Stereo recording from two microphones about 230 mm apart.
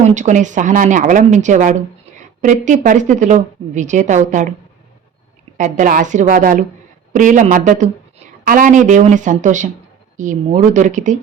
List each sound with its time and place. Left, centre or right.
0.0 s a woman's voice: right
5.5 s a woman's voice: right